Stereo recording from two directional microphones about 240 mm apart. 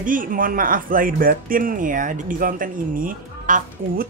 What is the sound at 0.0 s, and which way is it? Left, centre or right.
Speech, right.